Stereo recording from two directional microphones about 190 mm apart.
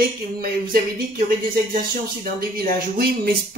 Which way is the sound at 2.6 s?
50° right (ahead or behind).